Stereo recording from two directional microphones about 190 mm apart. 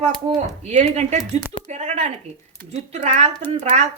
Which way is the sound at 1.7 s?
35° right (ahead or behind).